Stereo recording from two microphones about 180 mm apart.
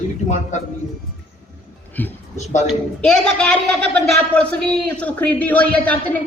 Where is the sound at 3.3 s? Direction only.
5° left (ahead or behind).